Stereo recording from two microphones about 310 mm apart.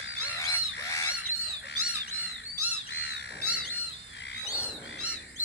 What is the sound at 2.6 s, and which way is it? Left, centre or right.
Squawk, left.